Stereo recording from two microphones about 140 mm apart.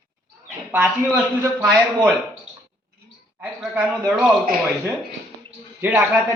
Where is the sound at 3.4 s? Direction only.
10° right (ahead or behind).